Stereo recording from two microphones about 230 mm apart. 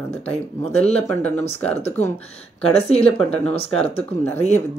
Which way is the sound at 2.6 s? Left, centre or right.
Left.